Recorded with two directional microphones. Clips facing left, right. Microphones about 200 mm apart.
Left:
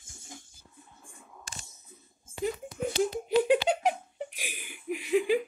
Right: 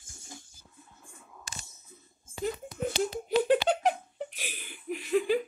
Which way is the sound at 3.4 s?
10° left (ahead or behind).